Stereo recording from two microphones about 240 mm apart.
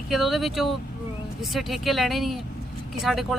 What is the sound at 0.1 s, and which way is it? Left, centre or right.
Speech, centre.